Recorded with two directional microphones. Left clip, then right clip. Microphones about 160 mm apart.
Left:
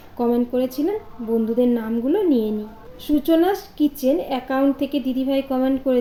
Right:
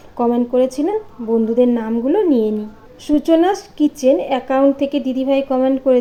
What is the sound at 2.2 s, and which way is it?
Speech, 60° right (ahead or behind).